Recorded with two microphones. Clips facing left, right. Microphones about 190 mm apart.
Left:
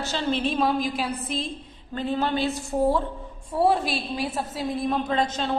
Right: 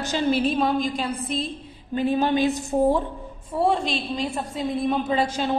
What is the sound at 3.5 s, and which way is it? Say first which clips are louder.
A woman's voice: even; 5° left (ahead or behind).